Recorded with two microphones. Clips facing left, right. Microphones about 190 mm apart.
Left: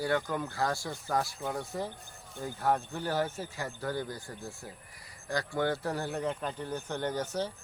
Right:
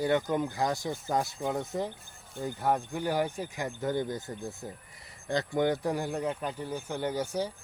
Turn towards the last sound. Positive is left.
turn(degrees=-10)  # may be behind; listen again after turning